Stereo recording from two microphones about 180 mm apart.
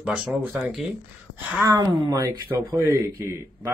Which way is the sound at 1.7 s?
20° right (ahead or behind).